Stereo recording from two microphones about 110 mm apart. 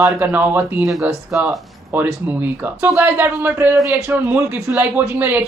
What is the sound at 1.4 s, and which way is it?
Speech, 25° right (ahead or behind).